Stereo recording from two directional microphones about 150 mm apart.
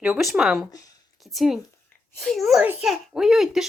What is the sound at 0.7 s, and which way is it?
Speech, 25° left (ahead or behind).